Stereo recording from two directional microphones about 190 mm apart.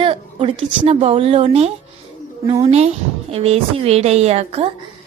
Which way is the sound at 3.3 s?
30° right (ahead or behind).